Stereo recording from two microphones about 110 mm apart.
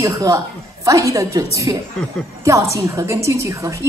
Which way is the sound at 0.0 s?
30° right (ahead or behind).